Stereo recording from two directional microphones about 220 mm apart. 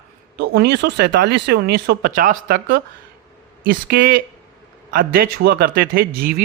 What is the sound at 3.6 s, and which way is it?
Speech, 45° right (ahead or behind).